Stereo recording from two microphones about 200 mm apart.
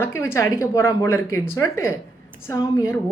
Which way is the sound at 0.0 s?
10° left (ahead or behind).